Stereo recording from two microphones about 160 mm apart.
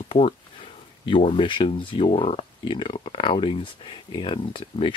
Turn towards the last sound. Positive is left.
turn(degrees=35)  # may be behind; listen again after turning